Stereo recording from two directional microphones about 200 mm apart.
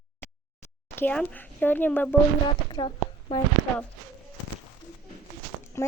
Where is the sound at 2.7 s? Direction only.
25° left (ahead or behind).